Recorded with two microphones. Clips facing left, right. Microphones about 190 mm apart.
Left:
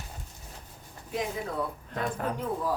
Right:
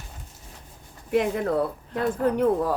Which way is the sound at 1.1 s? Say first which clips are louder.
Right 9 dB; 65° right (ahead or behind).